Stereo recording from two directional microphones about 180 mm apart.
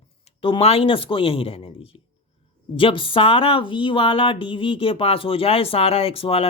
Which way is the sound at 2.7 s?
30° left (ahead or behind).